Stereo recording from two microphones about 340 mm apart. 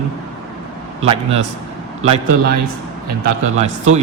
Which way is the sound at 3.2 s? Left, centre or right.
Centre.